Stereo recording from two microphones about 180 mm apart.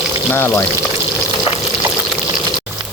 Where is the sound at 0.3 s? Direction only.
10° left (ahead or behind).